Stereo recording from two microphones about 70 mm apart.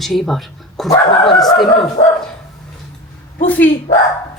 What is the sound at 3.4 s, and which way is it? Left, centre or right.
Speech, left.